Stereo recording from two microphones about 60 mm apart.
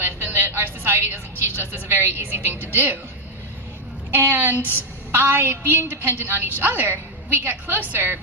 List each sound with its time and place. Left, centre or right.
0.0 s a sound: right
2.7 s a woman's voice: right
4.1 s a woman's voice: right